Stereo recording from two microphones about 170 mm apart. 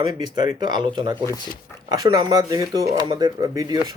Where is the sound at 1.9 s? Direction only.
25° right (ahead or behind).